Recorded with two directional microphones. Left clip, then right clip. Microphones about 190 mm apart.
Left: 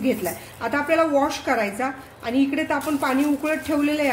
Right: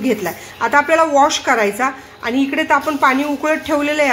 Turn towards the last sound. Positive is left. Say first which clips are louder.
# right 7 dB
turn(degrees=-25)  # may be behind; listen again after turning